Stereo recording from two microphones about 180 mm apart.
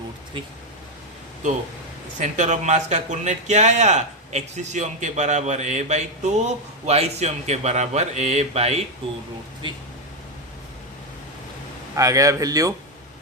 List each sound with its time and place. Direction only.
2.1 s speech: 40° right (ahead or behind)
11.9 s speech: 20° right (ahead or behind)